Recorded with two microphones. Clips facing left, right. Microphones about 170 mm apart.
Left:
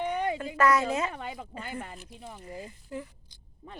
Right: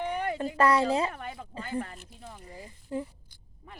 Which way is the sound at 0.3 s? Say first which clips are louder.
Right 2 dB; 30° right (ahead or behind).